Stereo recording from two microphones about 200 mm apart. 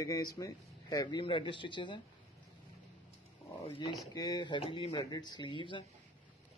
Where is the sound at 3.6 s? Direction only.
25° left (ahead or behind).